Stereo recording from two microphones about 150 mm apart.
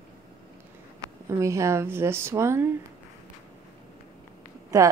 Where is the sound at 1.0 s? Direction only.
20° right (ahead or behind).